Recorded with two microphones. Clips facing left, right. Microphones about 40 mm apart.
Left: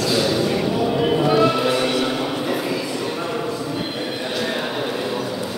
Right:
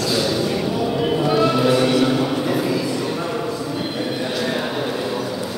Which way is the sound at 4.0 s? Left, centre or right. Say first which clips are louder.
Right 2 dB; left.